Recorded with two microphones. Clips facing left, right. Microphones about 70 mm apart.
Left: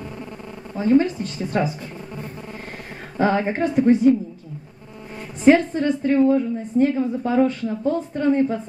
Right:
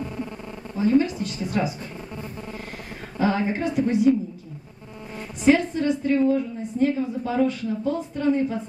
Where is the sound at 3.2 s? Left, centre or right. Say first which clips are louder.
Left 3 dB; left.